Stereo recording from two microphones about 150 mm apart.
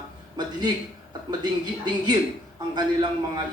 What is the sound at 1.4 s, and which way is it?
Speech, 25° right (ahead or behind).